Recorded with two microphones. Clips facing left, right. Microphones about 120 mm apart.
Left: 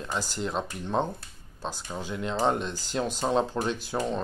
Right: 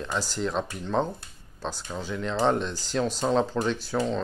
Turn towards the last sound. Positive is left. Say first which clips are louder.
# right 2 dB
turn(degrees=15)  # may be behind; listen again after turning